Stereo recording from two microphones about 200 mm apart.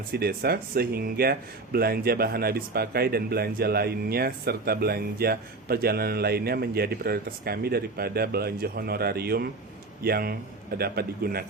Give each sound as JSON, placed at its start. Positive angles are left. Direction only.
{"t": 0.1, "sound": "speech", "side_deg": -50}